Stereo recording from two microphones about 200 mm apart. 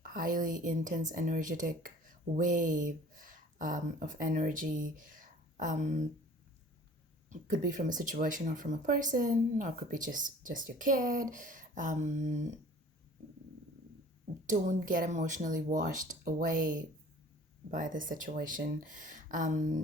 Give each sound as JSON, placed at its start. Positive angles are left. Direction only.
{"t": 0.0, "sound": "a woman's voice", "side_deg": -45}
{"t": 7.3, "sound": "speech", "side_deg": -40}
{"t": 14.4, "sound": "speech", "side_deg": -40}